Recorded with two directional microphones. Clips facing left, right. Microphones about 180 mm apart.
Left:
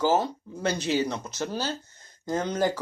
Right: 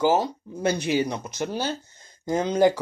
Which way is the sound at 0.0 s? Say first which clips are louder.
Right 2 dB; 15° right (ahead or behind).